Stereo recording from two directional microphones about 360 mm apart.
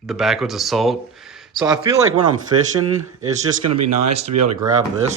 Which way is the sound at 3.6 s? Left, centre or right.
Right.